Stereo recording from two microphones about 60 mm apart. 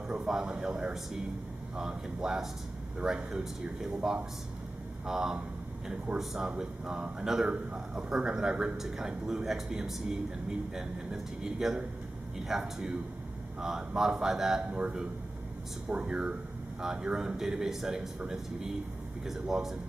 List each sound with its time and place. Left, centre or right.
0.1 s a man's voice: centre
11.1 s a man's voice: centre